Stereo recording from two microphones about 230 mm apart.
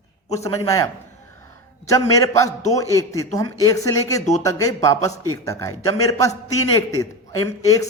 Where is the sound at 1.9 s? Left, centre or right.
Centre.